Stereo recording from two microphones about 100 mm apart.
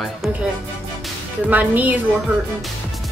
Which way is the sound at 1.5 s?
15° right (ahead or behind).